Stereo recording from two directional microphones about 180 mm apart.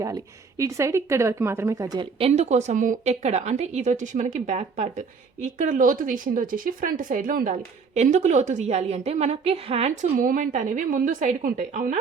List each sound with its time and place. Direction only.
0.6 s a woman's voice: 15° right (ahead or behind); by 11.9 s 45° right (ahead or behind)